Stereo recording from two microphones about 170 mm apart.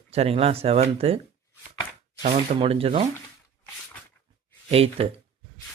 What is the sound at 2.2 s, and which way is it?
Speech, 35° right (ahead or behind).